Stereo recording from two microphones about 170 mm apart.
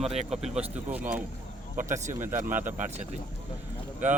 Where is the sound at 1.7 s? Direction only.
45° right (ahead or behind).